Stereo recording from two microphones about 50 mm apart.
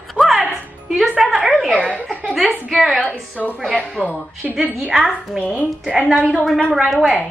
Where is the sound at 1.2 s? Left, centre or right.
Centre.